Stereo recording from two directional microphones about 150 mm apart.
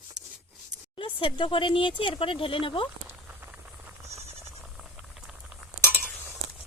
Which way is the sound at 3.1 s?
15° right (ahead or behind).